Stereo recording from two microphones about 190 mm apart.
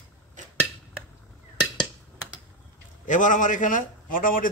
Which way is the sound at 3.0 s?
45° left (ahead or behind).